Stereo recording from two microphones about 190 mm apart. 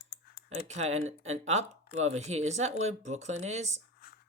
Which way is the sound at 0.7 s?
35° right (ahead or behind).